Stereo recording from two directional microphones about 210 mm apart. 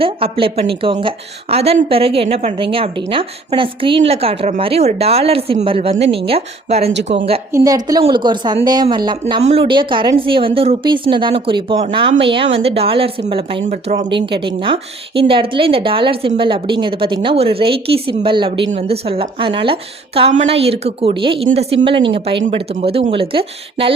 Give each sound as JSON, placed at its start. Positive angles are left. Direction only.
{"t": 0.0, "sound": "speech", "side_deg": -25}
{"t": 7.5, "sound": "speech", "side_deg": -15}
{"t": 14.3, "sound": "speech", "side_deg": -25}